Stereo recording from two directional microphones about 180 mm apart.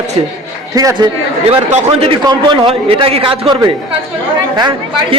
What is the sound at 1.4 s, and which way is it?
A man's voice, 35° right (ahead or behind).